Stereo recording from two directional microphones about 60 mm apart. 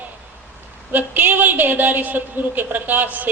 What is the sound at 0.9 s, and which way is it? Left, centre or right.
A woman's voice, right.